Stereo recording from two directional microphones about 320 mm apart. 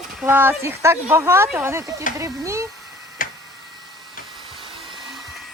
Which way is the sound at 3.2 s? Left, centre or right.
Left.